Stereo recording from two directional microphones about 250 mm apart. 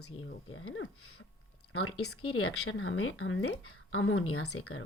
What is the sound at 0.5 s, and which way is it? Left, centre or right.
Speech, left.